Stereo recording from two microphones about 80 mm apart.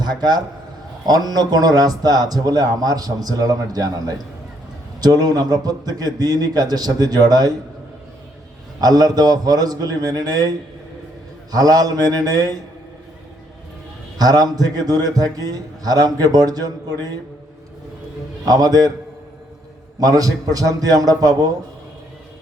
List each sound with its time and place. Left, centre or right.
0.0 s a man's voice: right
8.8 s a man's voice: right
11.5 s a man's voice: right
14.2 s a man's voice: right
18.4 s a man's voice: right
20.0 s a man's voice: right